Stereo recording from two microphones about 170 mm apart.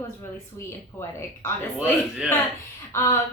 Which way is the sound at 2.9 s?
15° left (ahead or behind).